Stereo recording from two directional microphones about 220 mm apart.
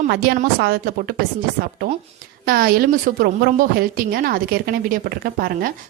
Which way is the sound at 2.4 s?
40° right (ahead or behind).